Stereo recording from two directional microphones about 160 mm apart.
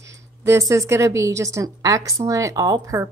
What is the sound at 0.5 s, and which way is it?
A woman's voice, 20° right (ahead or behind).